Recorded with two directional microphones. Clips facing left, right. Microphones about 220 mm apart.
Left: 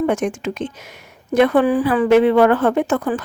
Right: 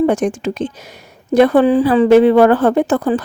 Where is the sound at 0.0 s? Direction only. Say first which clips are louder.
Right 4 dB; 35° right (ahead or behind).